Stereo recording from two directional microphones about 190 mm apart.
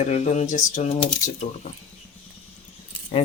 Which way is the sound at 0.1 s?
40° left (ahead or behind).